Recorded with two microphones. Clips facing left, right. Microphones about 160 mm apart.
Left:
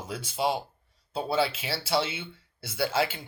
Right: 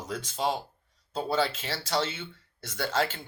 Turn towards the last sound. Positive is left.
turn(degrees=10)  # may be behind; listen again after turning